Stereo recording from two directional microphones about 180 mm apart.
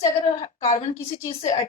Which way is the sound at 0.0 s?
40° left (ahead or behind).